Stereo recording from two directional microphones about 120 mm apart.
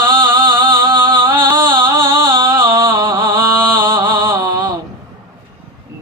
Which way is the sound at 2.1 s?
40° right (ahead or behind).